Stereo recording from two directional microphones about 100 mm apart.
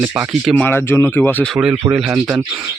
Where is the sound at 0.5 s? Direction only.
20° left (ahead or behind).